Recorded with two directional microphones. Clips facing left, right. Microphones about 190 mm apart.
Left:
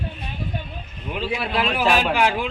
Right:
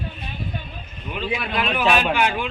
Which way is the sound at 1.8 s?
5° left (ahead or behind).